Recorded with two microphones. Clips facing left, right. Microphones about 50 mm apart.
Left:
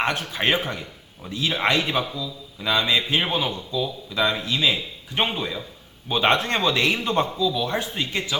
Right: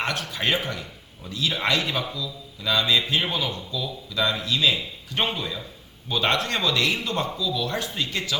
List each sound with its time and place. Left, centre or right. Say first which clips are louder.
0.0 s a man's voice: left 3 dB; left